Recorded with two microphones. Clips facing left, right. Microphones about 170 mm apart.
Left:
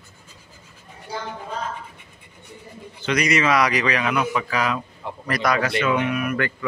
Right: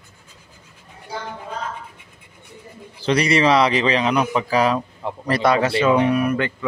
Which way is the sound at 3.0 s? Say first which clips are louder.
Right 4 dB; 30° right (ahead or behind).